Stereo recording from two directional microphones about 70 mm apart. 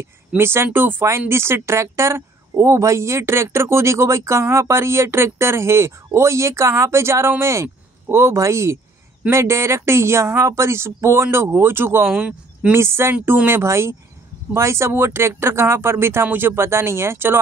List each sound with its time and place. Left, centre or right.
0.4 s speech: right
12.1 s a man's voice: centre
12.7 s speech: right